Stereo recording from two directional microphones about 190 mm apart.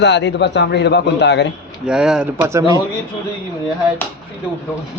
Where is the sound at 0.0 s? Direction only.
65° left (ahead or behind).